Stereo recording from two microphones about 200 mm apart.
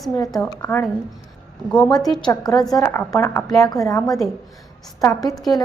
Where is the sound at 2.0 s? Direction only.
Centre (ahead or behind).